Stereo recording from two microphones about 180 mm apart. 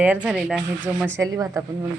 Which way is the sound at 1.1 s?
20° right (ahead or behind).